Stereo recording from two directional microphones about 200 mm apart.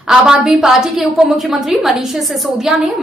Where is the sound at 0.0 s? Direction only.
5° right (ahead or behind).